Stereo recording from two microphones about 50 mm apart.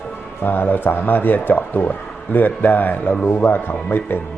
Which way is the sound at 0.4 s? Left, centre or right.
Left.